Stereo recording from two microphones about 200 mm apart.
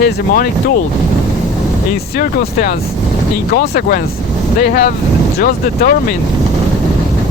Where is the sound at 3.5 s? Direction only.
50° left (ahead or behind).